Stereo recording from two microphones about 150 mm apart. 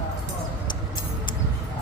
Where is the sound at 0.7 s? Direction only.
30° left (ahead or behind).